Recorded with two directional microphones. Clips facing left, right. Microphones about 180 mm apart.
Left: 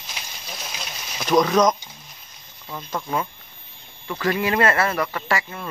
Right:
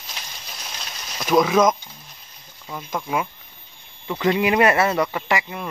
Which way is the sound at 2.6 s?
10° right (ahead or behind).